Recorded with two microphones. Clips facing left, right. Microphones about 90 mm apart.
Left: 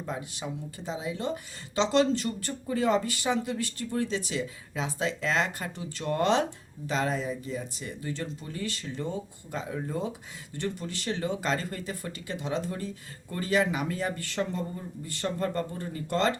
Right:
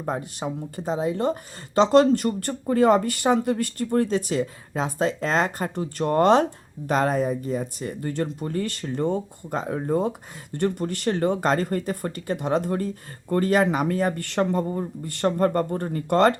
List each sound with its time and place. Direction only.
0.0 s speech: 50° right (ahead or behind)